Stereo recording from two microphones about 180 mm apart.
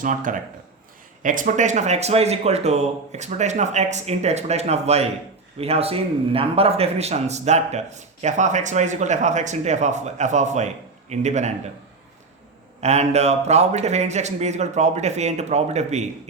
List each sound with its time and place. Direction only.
0.0 s speech: 45° right (ahead or behind)
12.8 s speech: 40° right (ahead or behind)